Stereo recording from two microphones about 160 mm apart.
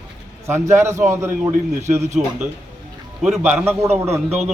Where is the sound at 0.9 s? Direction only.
50° right (ahead or behind).